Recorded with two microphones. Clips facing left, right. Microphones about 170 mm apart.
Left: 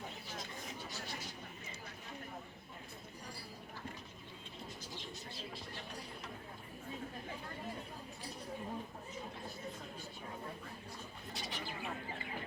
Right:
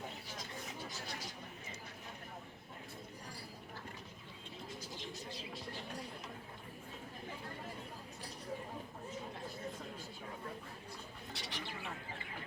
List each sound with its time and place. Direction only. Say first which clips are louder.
11.3 s pigeon: left 2 dB; 70° right (ahead or behind)